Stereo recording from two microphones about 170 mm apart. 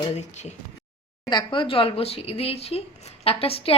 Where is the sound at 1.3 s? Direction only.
25° left (ahead or behind).